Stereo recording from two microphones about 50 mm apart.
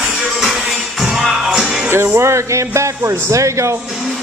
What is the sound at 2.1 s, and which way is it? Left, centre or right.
Speech, right.